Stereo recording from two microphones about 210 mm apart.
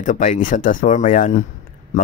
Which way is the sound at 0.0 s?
40° left (ahead or behind).